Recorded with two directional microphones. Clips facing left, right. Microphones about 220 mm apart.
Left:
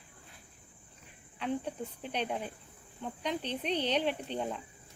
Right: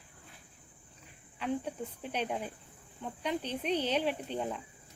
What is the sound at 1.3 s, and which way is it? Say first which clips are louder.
Speech: even; 5° right (ahead or behind).